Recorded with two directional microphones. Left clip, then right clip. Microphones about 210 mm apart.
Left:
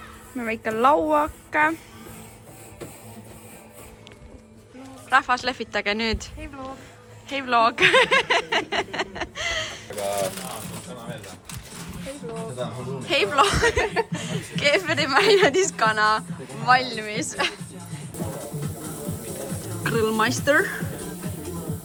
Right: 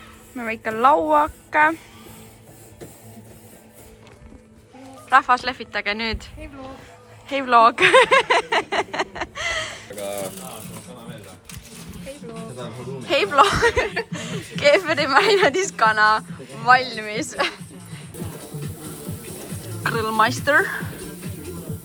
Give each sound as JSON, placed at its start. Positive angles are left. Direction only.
{"t": 0.3, "sound": "a woman's voice", "side_deg": 5}
{"t": 5.0, "sound": "speech", "side_deg": 5}
{"t": 9.9, "sound": "speech", "side_deg": 50}
{"t": 13.1, "sound": "speech", "side_deg": 5}
{"t": 19.8, "sound": "speech", "side_deg": 5}